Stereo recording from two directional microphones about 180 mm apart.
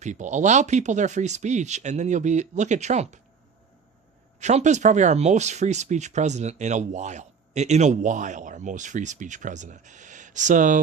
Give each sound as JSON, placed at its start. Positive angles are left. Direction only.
{"t": 0.0, "sound": "speech", "side_deg": -40}
{"t": 4.4, "sound": "speech", "side_deg": -40}